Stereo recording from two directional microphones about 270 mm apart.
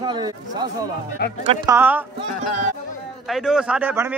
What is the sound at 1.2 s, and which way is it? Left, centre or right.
Speech, left.